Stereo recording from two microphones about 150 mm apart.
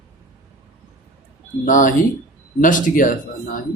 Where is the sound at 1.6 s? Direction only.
60° left (ahead or behind).